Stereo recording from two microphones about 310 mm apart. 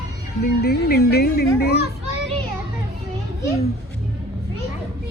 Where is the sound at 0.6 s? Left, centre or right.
Left.